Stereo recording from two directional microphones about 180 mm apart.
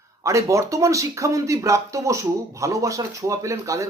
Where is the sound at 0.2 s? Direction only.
15° right (ahead or behind).